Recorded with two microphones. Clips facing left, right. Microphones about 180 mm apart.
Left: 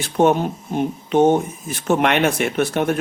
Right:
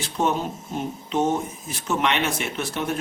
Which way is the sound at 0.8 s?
55° left (ahead or behind).